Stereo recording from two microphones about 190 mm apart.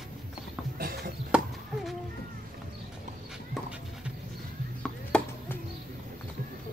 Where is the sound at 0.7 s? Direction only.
55° right (ahead or behind).